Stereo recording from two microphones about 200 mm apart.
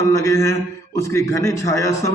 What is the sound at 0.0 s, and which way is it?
Mantra, 15° left (ahead or behind).